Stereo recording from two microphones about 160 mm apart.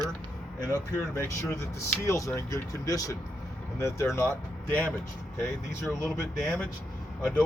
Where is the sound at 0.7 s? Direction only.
15° left (ahead or behind).